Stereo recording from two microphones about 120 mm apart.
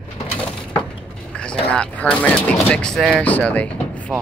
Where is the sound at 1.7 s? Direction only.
5° left (ahead or behind).